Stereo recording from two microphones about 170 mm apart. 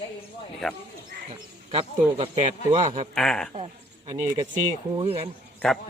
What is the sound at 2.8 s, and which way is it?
Speech, 45° right (ahead or behind).